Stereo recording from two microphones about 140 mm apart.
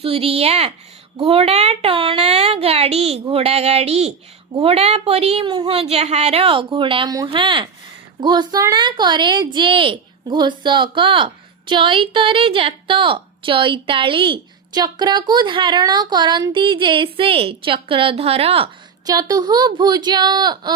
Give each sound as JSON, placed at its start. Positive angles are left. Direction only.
{"t": 0.0, "sound": "a woman's voice", "side_deg": -45}
{"t": 19.0, "sound": "speech", "side_deg": -25}